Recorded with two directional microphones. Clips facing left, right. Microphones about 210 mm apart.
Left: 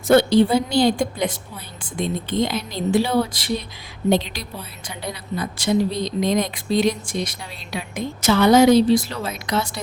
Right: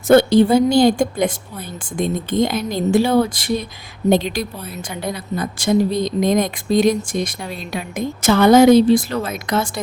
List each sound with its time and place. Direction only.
0.1 s a woman's voice: 50° right (ahead or behind)